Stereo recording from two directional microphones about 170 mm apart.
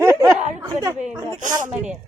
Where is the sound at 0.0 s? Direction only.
20° right (ahead or behind).